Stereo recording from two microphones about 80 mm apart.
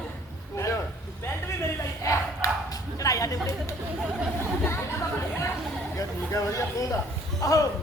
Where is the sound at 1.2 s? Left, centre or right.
Left.